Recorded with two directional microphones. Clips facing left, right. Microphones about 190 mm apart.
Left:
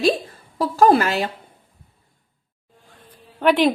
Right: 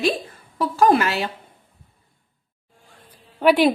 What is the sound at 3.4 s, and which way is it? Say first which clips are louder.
Speech: right 1 dB; 10° right (ahead or behind).